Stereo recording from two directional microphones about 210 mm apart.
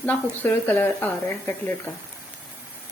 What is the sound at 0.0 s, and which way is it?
A woman's voice, 10° left (ahead or behind).